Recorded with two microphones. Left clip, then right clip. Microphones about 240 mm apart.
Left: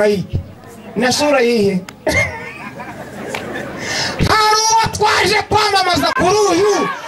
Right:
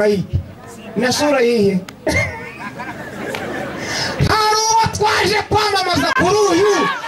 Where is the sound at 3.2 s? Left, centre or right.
Centre.